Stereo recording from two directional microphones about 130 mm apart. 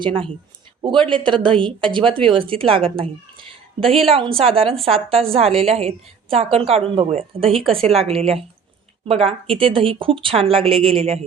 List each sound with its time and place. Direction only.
0.0 s speech: 45° right (ahead or behind)
3.8 s a woman's voice: centre (ahead or behind)
4.1 s speech: 45° right (ahead or behind)